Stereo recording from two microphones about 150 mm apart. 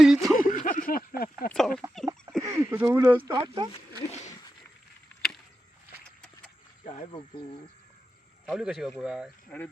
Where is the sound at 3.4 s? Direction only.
30° right (ahead or behind).